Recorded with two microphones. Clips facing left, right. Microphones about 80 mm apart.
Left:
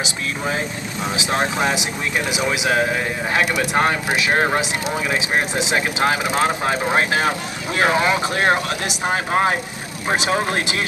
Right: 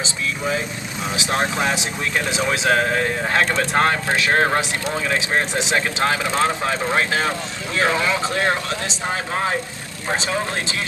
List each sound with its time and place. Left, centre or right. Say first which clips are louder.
1.1 s speech: even; left
9.3 s speech: left 5 dB; left
10.2 s speech: left 3 dB; left